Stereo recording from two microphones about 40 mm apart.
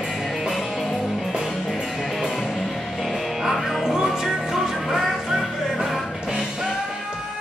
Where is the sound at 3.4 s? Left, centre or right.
Centre.